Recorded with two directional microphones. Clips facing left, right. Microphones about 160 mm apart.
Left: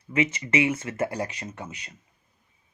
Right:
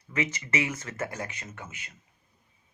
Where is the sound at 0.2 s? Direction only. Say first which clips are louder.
Left 6 dB; 25° left (ahead or behind).